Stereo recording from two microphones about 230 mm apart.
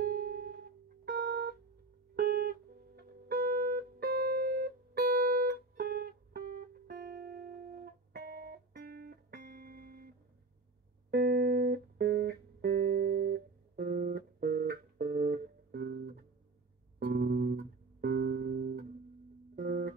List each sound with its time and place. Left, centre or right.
0.0 s music: right
2.1 s guitar: right
3.0 s music: right